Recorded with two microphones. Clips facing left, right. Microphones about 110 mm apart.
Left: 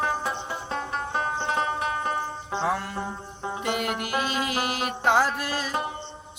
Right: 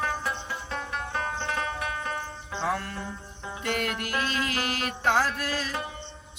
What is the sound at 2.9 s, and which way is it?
Music, 30° left (ahead or behind).